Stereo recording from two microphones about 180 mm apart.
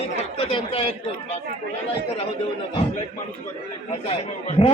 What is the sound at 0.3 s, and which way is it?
Speech, 35° left (ahead or behind).